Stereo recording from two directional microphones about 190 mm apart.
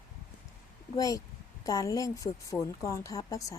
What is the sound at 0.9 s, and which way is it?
Speech, 20° left (ahead or behind).